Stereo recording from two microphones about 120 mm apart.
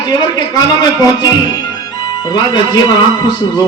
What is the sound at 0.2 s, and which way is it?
Speech, 35° left (ahead or behind).